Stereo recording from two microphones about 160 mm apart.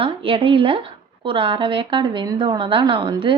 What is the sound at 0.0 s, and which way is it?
Speech, 35° right (ahead or behind).